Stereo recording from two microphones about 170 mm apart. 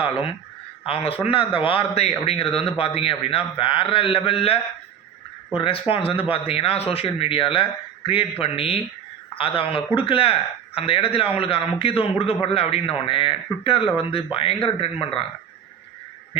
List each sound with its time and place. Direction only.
0.0 s a man's voice: 35° left (ahead or behind)